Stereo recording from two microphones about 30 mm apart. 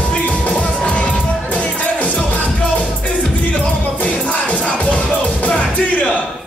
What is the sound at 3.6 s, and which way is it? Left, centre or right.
Music, left.